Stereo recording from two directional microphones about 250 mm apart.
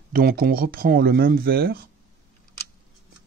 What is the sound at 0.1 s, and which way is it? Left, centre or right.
Speech, right.